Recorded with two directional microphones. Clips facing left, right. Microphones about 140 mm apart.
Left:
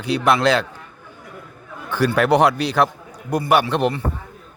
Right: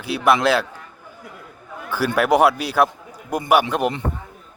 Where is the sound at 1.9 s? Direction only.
10° right (ahead or behind).